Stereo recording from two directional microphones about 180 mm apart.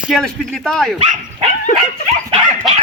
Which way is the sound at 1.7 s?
45° left (ahead or behind).